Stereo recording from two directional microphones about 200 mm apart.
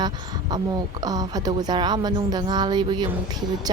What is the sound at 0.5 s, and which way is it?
A woman's voice, 20° right (ahead or behind).